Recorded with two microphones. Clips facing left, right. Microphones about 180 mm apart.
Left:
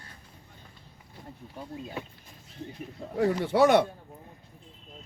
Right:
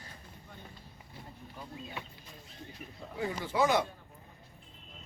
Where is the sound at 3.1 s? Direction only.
70° left (ahead or behind).